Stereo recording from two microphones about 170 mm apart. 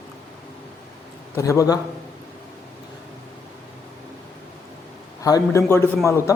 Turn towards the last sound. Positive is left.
turn(degrees=15)  # may be behind; listen again after turning